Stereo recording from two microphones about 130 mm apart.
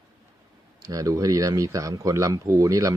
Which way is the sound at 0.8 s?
25° right (ahead or behind).